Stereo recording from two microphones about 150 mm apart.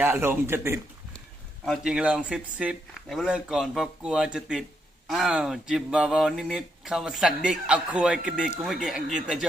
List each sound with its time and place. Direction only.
0.0 s a man's voice: 15° right (ahead or behind)
1.6 s speech: centre (ahead or behind)